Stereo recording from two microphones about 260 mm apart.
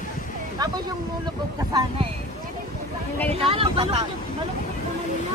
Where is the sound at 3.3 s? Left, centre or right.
Right.